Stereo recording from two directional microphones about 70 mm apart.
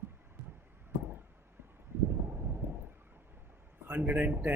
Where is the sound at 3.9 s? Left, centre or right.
Right.